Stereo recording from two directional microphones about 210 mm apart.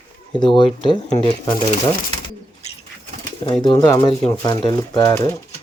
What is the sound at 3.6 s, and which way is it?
Speech, 20° left (ahead or behind).